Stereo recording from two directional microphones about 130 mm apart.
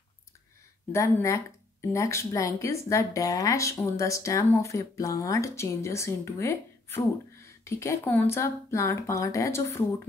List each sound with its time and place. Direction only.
0.9 s speech: 20° left (ahead or behind)